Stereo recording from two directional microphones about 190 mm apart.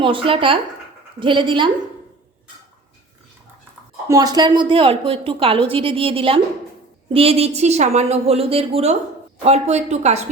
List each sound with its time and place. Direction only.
0.0 s a woman's voice: 25° right (ahead or behind)
4.1 s a woman's voice: 20° right (ahead or behind); by 10.2 s 35° right (ahead or behind)